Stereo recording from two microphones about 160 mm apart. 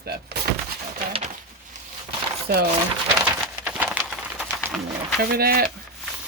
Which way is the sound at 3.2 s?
10° right (ahead or behind).